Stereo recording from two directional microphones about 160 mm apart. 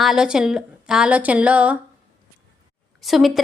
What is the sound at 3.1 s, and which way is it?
Speech, centre (ahead or behind).